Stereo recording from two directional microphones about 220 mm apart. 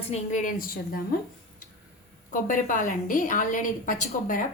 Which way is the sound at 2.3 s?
35° left (ahead or behind).